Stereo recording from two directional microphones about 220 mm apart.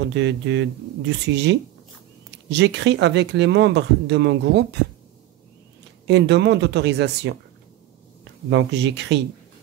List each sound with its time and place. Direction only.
0.1 s speech: 55° right (ahead or behind)
6.0 s speech: 50° right (ahead or behind)
8.5 s speech: 55° right (ahead or behind)